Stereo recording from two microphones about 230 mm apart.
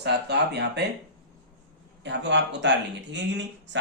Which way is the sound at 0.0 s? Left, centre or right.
Right.